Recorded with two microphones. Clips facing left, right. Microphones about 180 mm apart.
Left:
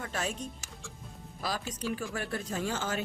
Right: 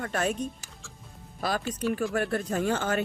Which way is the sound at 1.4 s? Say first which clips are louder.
Right 6 dB; 55° right (ahead or behind).